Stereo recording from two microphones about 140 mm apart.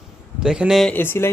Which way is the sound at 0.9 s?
15° left (ahead or behind).